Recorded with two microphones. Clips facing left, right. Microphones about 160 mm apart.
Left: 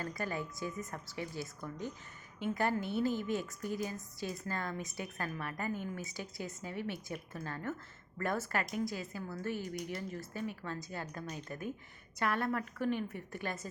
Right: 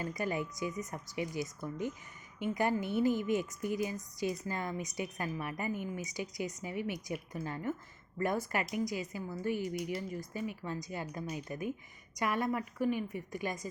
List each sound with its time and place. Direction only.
0.0 s a woman's voice: 15° right (ahead or behind)